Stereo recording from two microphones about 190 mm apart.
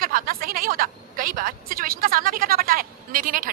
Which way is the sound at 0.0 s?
50° right (ahead or behind).